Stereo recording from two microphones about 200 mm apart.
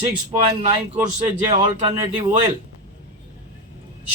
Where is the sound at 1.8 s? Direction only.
25° right (ahead or behind).